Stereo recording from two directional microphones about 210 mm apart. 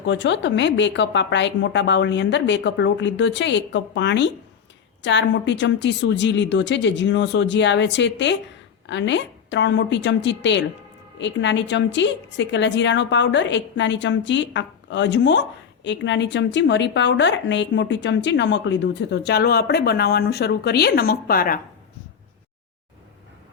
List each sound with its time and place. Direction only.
0.0 s a woman's voice: 60° left (ahead or behind); by 21.6 s 45° left (ahead or behind)